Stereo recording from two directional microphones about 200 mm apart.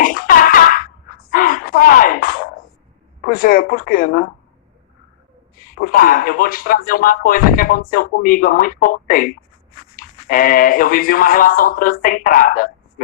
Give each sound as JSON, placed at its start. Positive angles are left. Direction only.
{"t": 0.0, "sound": "music", "side_deg": 45}
{"t": 1.3, "sound": "a sound", "side_deg": 45}
{"t": 3.2, "sound": "speech", "side_deg": 45}
{"t": 5.8, "sound": "speech", "side_deg": 45}